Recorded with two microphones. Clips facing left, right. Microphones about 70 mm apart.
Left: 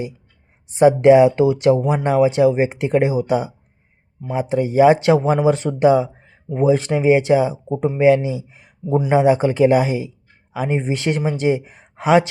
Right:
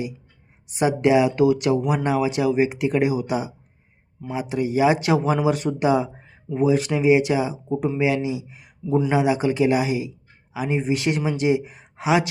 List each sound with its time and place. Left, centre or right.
0.7 s speech: left